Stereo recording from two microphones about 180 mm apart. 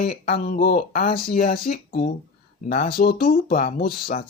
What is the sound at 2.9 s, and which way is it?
Speech, 55° left (ahead or behind).